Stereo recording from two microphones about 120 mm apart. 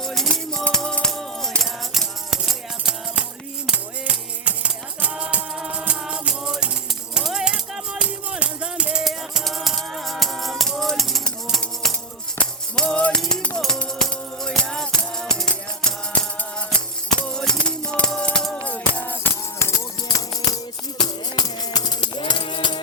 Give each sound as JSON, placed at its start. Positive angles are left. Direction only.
{"t": 0.0, "sound": "music", "side_deg": 0}
{"t": 17.1, "sound": "music", "side_deg": 5}
{"t": 20.1, "sound": "music", "side_deg": 30}